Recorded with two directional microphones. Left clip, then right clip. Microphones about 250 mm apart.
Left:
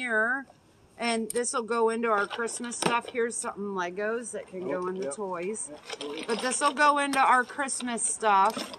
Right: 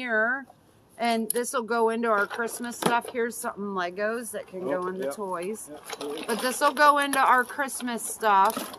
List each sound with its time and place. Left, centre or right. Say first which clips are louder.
0.0 s speech: right 1 dB; centre